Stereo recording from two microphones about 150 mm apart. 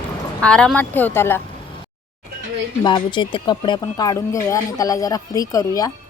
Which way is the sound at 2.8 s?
30° left (ahead or behind).